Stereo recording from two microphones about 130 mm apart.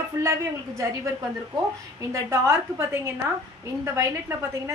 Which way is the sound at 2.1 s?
25° right (ahead or behind).